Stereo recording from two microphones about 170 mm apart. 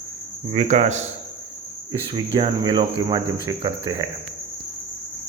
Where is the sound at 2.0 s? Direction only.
30° right (ahead or behind).